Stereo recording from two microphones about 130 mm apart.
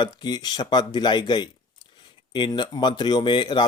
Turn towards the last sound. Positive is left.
turn(degrees=35)  # may be behind; listen again after turning